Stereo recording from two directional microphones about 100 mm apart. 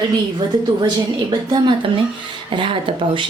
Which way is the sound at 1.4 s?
55° right (ahead or behind).